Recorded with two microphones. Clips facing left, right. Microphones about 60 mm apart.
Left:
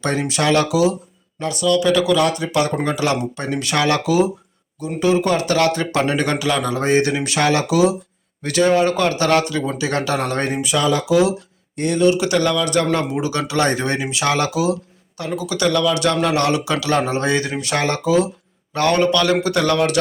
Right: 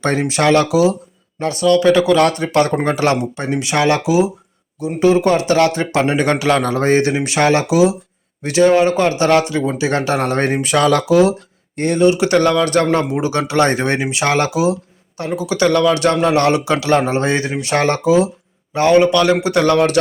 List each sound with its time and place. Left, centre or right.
0.0 s speech: right
2.1 s speech: right
3.2 s speech: right
10.8 s speech: right
11.0 s a man's voice: right